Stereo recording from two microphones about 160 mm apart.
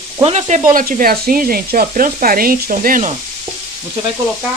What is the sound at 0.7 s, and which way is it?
Speech, 60° right (ahead or behind).